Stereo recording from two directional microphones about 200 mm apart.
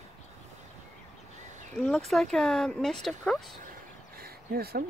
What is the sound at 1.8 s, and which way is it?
Speech, centre (ahead or behind).